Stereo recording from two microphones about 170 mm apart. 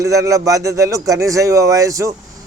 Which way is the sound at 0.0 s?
20° right (ahead or behind).